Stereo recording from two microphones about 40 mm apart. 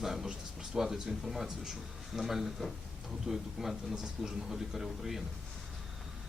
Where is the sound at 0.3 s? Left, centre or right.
Right.